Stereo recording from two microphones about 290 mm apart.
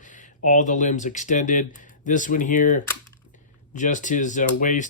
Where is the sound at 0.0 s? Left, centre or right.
Left.